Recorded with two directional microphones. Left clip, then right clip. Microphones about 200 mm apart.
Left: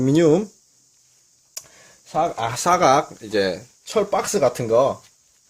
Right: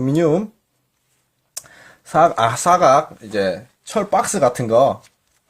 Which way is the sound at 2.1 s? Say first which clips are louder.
Right 8 dB; 25° right (ahead or behind).